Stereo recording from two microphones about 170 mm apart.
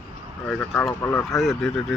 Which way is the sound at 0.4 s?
5° left (ahead or behind).